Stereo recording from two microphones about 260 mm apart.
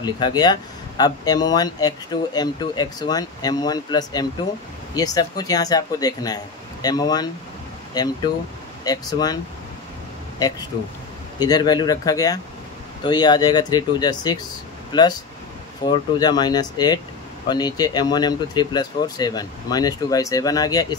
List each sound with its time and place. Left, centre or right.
0.0 s speech: centre
11.3 s speech: centre